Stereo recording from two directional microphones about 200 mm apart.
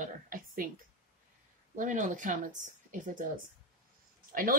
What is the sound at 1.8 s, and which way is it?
Speech, 40° right (ahead or behind).